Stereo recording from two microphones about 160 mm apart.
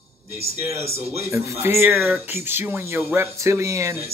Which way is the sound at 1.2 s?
20° right (ahead or behind).